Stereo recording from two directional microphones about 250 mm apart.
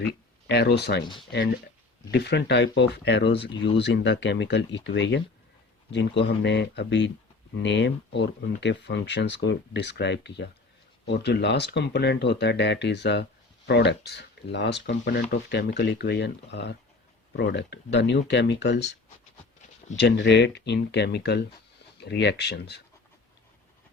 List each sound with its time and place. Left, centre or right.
0.0 s speech: left
2.0 s speech: left
20.0 s speech: left